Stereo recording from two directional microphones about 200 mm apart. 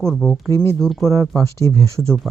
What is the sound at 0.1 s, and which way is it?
Speech, 5° left (ahead or behind).